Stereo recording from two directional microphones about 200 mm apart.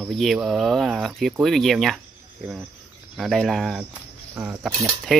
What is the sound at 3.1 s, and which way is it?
Speech, centre (ahead or behind).